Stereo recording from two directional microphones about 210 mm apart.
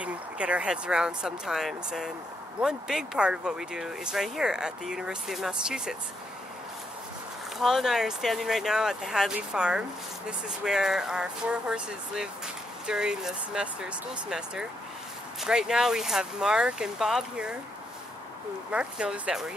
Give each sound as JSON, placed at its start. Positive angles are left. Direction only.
{"t": 0.0, "sound": "speech", "side_deg": -5}
{"t": 7.5, "sound": "speech", "side_deg": 0}
{"t": 18.7, "sound": "speech", "side_deg": -5}